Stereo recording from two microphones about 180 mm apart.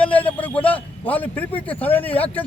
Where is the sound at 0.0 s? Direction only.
10° left (ahead or behind).